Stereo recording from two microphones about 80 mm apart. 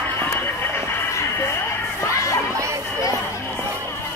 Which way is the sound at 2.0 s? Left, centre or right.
Left.